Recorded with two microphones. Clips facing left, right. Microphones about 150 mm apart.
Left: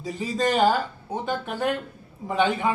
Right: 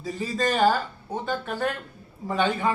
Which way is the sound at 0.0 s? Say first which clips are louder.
Left 1 dB; 15° left (ahead or behind).